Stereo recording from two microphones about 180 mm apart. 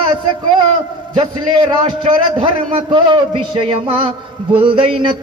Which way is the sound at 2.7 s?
25° right (ahead or behind).